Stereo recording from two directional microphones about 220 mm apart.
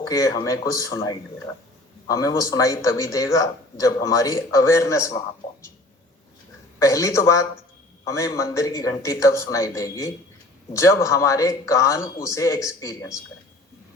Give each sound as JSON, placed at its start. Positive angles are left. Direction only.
{"t": 0.0, "sound": "a man's voice", "side_deg": 15}
{"t": 6.7, "sound": "a man's voice", "side_deg": 15}